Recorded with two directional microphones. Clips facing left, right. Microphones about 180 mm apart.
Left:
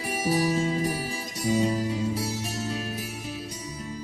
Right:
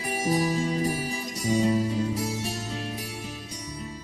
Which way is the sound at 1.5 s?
Centre (ahead or behind).